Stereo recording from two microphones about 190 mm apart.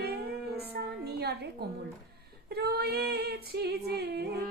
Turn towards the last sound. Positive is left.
turn(degrees=-60)  # may be behind; listen again after turning